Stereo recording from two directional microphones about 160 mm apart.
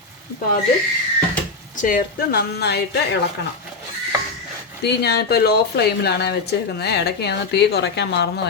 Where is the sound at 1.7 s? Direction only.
60° left (ahead or behind); by 2.8 s 85° left.